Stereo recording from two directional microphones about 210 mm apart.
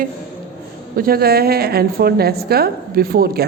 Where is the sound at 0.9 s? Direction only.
45° right (ahead or behind).